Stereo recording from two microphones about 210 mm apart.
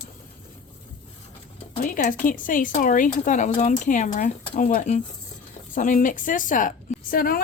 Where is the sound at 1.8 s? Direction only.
40° left (ahead or behind).